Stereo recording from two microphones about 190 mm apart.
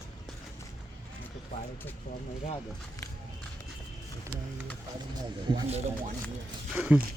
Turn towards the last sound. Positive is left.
turn(degrees=-5)  # may be behind; listen again after turning